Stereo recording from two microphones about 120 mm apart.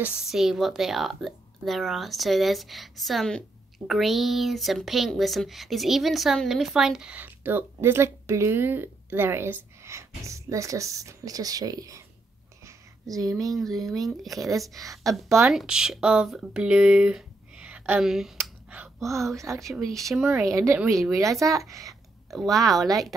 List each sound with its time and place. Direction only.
0.0 s a woman's voice: 5° right (ahead or behind); by 12.0 s 30° right (ahead or behind)
12.6 s a sound: 30° right (ahead or behind)
13.6 s a woman's voice: centre (ahead or behind)
18.4 s a sound: 15° right (ahead or behind)
19.0 s speech: 25° right (ahead or behind)
19.6 s a woman's voice: centre (ahead or behind)
20.4 s speech: 25° right (ahead or behind)
22.3 s a woman's voice: centre (ahead or behind)